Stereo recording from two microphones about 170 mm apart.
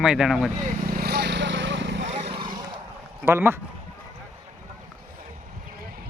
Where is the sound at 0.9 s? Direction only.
70° right (ahead or behind); by 2.0 s 90° right.